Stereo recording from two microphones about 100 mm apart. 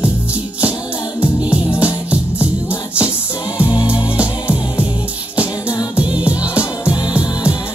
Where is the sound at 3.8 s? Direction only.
15° right (ahead or behind).